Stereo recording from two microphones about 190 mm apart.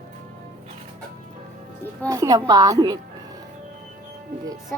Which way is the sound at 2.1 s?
20° right (ahead or behind).